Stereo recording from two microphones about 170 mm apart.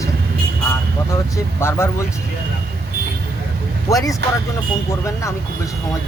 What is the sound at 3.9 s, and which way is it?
Speech, 20° left (ahead or behind).